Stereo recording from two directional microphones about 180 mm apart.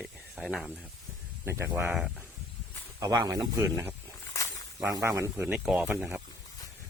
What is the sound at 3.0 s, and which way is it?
Speech, 20° right (ahead or behind).